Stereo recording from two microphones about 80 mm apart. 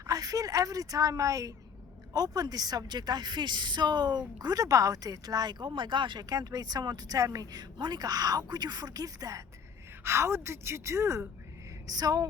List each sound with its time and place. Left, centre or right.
0.1 s a woman's voice: right
4.4 s speech: right
6.2 s speech: right
10.0 s a woman's voice: right
11.9 s a woman's voice: right